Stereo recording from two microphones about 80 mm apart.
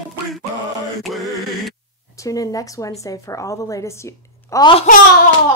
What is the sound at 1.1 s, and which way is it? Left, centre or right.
Speech, centre.